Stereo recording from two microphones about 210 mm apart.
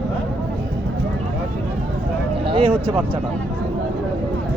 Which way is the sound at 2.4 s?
25° right (ahead or behind).